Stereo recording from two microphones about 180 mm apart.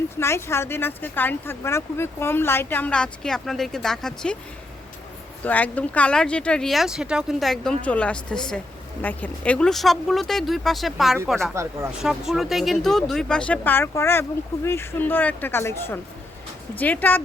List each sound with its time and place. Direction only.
0.2 s speech: 15° left (ahead or behind)
5.4 s speech: 10° left (ahead or behind)
11.5 s speech: 15° right (ahead or behind)
12.0 s speech: centre (ahead or behind)